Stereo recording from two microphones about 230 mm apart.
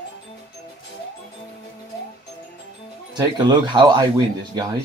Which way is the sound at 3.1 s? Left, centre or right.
Centre.